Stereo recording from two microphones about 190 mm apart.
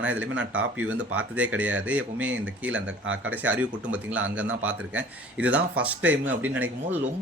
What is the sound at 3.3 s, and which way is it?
Speech, 10° right (ahead or behind).